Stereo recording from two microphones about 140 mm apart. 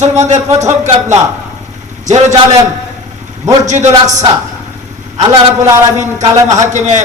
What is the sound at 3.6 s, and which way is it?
Speech, 55° right (ahead or behind).